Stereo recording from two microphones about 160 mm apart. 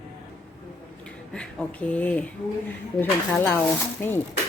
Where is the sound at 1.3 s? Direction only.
10° left (ahead or behind).